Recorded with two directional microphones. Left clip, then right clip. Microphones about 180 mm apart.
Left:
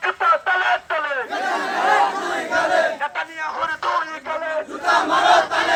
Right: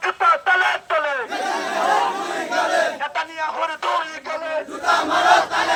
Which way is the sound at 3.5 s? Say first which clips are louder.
Left 1 dB; 40° right (ahead or behind).